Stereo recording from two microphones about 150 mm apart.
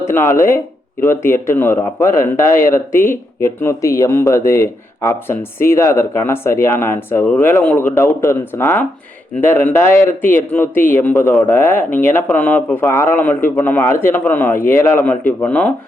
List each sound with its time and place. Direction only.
0.0 s speech: 15° left (ahead or behind)
2.5 s speech: 70° left (ahead or behind)
2.7 s speech: 15° left (ahead or behind)